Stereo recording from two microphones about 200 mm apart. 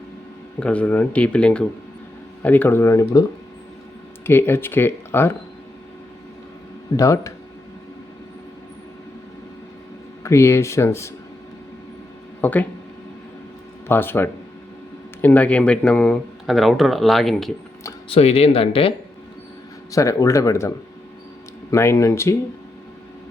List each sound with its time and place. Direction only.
0.6 s speech: 5° left (ahead or behind)
4.3 s speech: 10° left (ahead or behind)
6.9 s speech: 15° left (ahead or behind)
10.2 s speech: 15° left (ahead or behind)
12.4 s speech: 10° left (ahead or behind)
13.8 s speech: 10° left (ahead or behind)
18.1 s speech: 30° left (ahead or behind)
19.9 s speech: 15° left (ahead or behind)